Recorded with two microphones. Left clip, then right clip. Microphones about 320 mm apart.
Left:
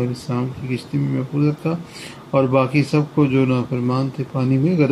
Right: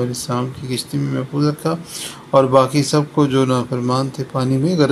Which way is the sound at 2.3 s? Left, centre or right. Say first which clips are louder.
Right 4 dB; right.